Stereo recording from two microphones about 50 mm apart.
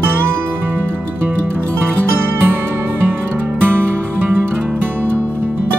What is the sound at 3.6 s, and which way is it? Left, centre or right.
Music, right.